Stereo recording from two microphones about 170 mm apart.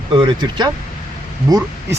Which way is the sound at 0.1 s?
25° right (ahead or behind).